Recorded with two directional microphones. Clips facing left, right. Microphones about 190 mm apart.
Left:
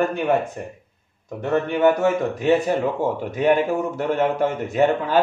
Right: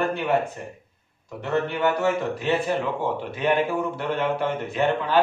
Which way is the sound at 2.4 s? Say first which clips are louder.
Left 5 dB; 45° left (ahead or behind).